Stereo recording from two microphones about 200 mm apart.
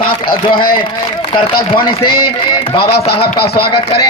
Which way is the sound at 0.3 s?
45° left (ahead or behind).